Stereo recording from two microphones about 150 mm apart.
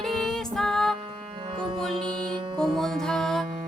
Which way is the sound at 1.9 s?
30° right (ahead or behind).